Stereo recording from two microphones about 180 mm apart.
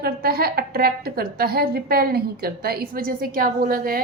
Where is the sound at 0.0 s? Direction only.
60° right (ahead or behind).